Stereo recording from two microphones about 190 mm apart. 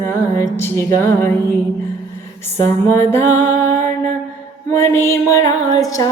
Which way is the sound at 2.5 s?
15° left (ahead or behind).